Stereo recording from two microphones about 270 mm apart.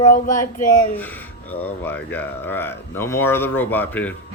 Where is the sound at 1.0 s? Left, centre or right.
Centre.